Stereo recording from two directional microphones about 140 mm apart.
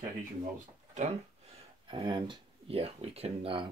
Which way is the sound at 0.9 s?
55° right (ahead or behind).